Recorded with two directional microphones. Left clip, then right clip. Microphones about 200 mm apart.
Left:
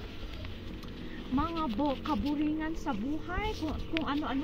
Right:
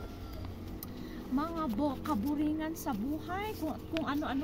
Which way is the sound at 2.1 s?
25° right (ahead or behind).